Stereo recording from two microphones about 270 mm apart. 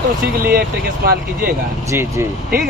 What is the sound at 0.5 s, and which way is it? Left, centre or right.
Speech, right.